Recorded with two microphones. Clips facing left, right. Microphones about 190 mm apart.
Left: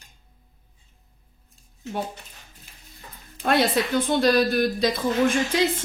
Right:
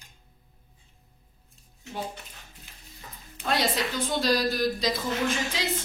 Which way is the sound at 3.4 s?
55° left (ahead or behind).